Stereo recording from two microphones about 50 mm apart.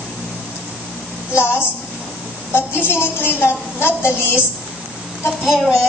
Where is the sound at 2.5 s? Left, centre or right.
Left.